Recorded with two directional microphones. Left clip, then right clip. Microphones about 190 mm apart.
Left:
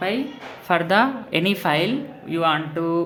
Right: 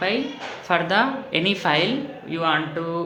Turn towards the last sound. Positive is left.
turn(degrees=35)  # may be behind; listen again after turning